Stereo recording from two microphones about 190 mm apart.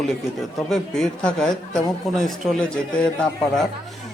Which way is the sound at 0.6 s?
Centre (ahead or behind).